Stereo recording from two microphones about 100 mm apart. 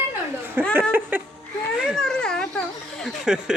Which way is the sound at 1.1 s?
20° right (ahead or behind).